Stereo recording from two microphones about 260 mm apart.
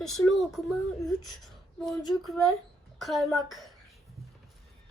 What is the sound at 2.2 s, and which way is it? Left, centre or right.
A child's voice, centre.